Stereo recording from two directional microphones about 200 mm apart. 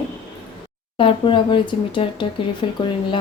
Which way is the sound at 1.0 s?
25° left (ahead or behind).